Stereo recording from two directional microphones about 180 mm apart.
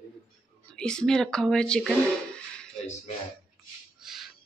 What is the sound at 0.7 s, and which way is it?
A man's voice, 5° left (ahead or behind).